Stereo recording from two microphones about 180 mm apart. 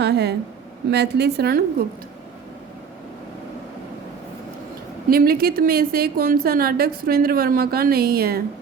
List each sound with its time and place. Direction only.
0.0 s a woman's voice: 65° right (ahead or behind)
5.0 s a woman's voice: 55° right (ahead or behind)